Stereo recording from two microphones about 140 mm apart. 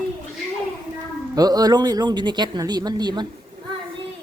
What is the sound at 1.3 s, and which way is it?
Speech, 30° right (ahead or behind).